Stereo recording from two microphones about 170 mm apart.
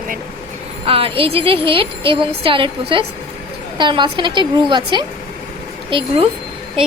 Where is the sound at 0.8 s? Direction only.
35° right (ahead or behind).